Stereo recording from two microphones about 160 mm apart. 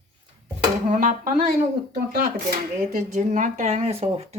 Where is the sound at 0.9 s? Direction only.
55° right (ahead or behind).